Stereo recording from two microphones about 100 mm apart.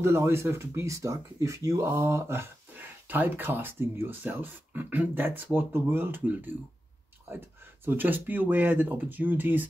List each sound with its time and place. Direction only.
0.0 s speech: 25° right (ahead or behind)